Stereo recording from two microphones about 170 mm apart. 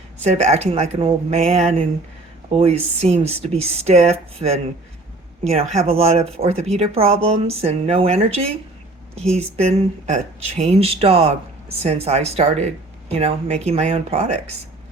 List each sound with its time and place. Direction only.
0.2 s speech: 40° right (ahead or behind)
9.6 s speech: 40° right (ahead or behind)